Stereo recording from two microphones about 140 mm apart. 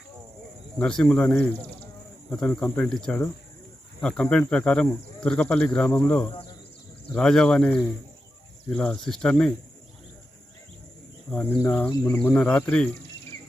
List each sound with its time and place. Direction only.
0.8 s speech: 10° left (ahead or behind)
11.6 s speech: 15° left (ahead or behind)